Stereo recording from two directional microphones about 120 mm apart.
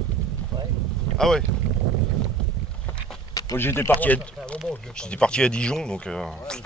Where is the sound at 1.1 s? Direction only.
20° left (ahead or behind).